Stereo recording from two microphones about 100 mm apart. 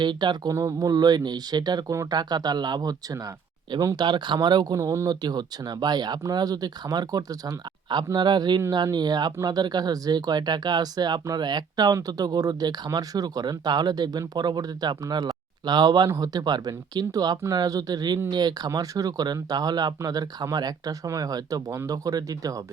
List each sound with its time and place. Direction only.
0.0 s speech: 50° right (ahead or behind)
0.5 s speech: 35° right (ahead or behind)
5.2 s speech: 45° right (ahead or behind)